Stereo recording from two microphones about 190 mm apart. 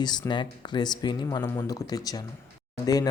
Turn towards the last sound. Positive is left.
turn(degrees=20)  # may be behind; listen again after turning